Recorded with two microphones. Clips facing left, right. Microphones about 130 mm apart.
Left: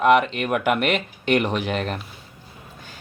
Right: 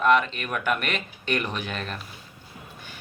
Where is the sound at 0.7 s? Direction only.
20° left (ahead or behind).